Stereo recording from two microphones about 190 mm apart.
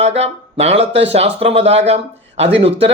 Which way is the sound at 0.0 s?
35° right (ahead or behind).